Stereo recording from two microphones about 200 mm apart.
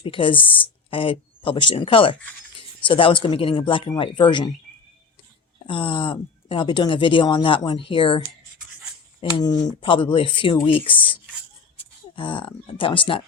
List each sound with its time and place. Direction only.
0.0 s speech: 25° left (ahead or behind)
5.6 s speech: 25° left (ahead or behind)
9.4 s speech: 20° left (ahead or behind)